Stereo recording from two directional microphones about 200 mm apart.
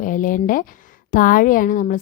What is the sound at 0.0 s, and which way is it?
Speech, 40° left (ahead or behind).